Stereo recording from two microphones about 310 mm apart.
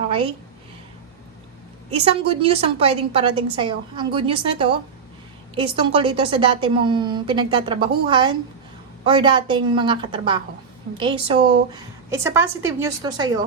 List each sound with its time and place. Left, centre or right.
1.9 s a woman's voice: centre